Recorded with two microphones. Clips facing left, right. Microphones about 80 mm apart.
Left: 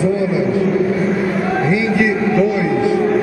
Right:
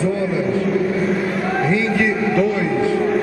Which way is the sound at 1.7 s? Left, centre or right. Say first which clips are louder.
Left 3 dB; centre.